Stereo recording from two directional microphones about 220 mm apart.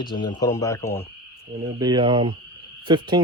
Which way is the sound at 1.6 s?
15° right (ahead or behind).